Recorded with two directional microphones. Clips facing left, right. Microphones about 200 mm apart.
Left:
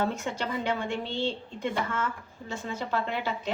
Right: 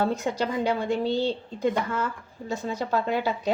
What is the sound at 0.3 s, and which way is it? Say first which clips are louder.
A woman's voice: right 5 dB; 35° right (ahead or behind).